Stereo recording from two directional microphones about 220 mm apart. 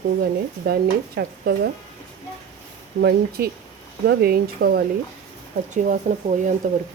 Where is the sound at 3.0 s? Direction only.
45° right (ahead or behind).